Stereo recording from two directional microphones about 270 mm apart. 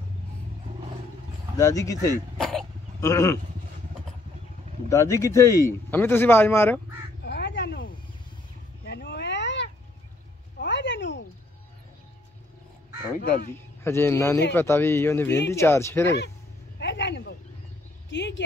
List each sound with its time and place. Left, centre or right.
1.6 s a man's voice: centre
2.4 s throat clearing: centre
4.8 s a man's voice: centre
7.2 s crow: left
8.8 s cat: left
10.6 s a sound: left
13.8 s a man's voice: centre
16.8 s a sound: left
18.1 s vehicle: left